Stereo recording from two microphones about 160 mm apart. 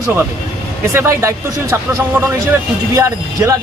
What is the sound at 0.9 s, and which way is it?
A man's voice, 15° right (ahead or behind).